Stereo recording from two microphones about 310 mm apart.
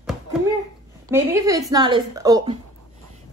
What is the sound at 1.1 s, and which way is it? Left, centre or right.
A woman's voice, centre.